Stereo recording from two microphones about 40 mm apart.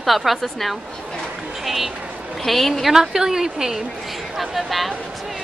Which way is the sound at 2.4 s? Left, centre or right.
Centre.